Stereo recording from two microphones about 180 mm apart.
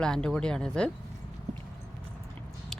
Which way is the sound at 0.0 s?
5° left (ahead or behind).